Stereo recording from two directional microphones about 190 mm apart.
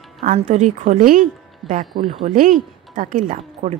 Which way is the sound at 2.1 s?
30° right (ahead or behind).